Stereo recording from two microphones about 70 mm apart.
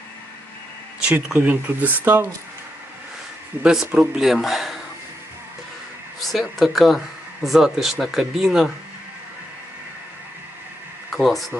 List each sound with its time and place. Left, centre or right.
1.4 s speech: right
3.6 s speech: centre
6.1 s speech: centre
11.1 s speech: centre